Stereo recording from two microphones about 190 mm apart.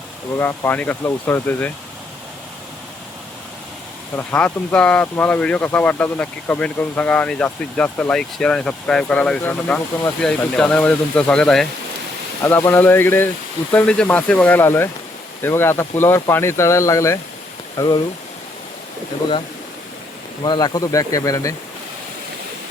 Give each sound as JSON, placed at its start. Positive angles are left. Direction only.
{"t": 0.3, "sound": "speech", "side_deg": 10}
{"t": 4.1, "sound": "speech", "side_deg": 10}
{"t": 20.4, "sound": "speech", "side_deg": 25}